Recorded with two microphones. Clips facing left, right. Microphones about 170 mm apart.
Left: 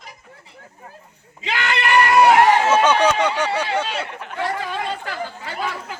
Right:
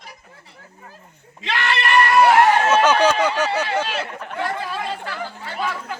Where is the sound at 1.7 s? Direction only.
15° left (ahead or behind).